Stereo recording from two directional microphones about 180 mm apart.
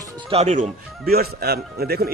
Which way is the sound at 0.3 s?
40° right (ahead or behind).